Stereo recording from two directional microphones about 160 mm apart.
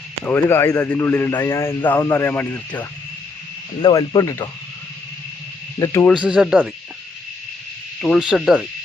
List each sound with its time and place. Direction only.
0.3 s speech: 15° left (ahead or behind)
3.8 s speech: 25° left (ahead or behind)
5.8 s speech: 20° left (ahead or behind)
6.1 s speech: 5° right (ahead or behind)
8.0 s speech: centre (ahead or behind)